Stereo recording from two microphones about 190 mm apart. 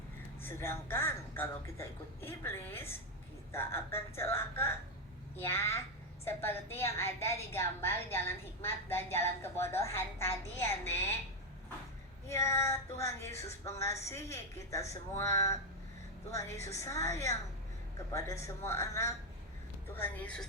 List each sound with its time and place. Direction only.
0.4 s a woman's voice: 10° left (ahead or behind)
12.3 s a woman's voice: 15° left (ahead or behind)